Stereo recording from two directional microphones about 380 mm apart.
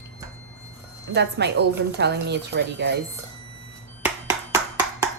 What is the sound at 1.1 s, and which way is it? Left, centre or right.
A woman's voice, right.